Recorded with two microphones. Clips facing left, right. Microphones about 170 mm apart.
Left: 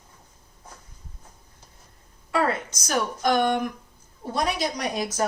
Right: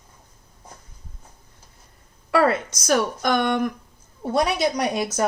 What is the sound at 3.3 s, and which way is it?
Speech, 70° right (ahead or behind).